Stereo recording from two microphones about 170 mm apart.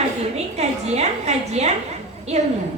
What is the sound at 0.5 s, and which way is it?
A woman's voice, 40° right (ahead or behind).